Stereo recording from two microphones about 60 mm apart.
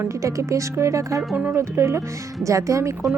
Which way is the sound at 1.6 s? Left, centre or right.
Right.